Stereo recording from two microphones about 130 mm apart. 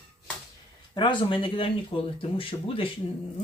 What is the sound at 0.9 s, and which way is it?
Speech, 40° left (ahead or behind).